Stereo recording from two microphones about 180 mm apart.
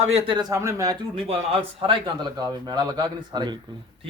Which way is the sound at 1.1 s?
30° right (ahead or behind).